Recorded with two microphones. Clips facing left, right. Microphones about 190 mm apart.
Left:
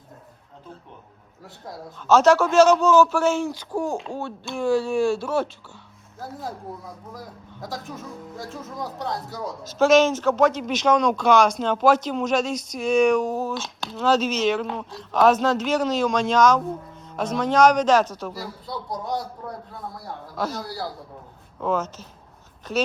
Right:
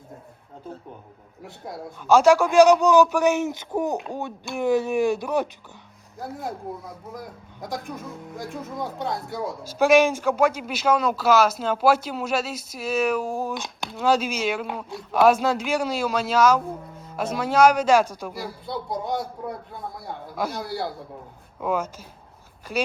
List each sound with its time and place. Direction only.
2.0 s speech: 10° right (ahead or behind)
6.1 s speech: centre (ahead or behind)
8.7 s speech: centre (ahead or behind)
9.6 s speech: 10° right (ahead or behind)
20.3 s speech: 10° right (ahead or behind)
21.6 s speech: 10° right (ahead or behind)